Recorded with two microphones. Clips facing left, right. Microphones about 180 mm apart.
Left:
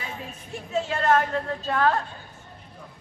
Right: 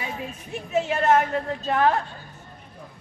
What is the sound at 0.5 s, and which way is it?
A woman's voice, 20° right (ahead or behind).